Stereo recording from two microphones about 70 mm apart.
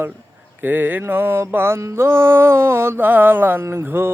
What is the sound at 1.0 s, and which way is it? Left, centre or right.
Music, right.